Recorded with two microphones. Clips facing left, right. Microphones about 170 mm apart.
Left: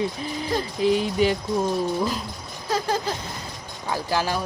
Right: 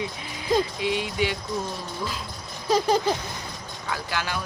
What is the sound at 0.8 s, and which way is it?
Speech, 40° left (ahead or behind).